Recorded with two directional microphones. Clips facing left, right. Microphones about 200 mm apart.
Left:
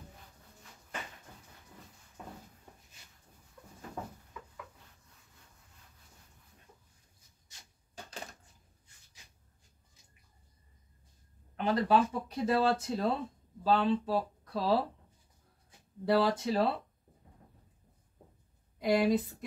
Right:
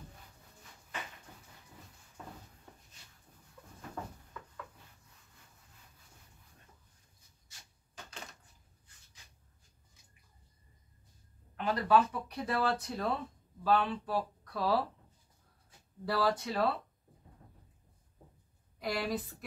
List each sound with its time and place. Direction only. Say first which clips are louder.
11.5 s speech: left 1 dB; 25° left (ahead or behind)
16.1 s speech: left 4 dB; 25° left (ahead or behind)
18.8 s speech: left 8 dB; 20° left (ahead or behind)